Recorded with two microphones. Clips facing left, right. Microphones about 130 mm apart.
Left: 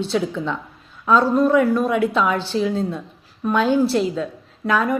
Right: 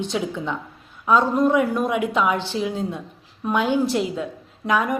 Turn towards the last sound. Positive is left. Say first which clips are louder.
# left 2 dB
turn(degrees=-15)  # may be behind; listen again after turning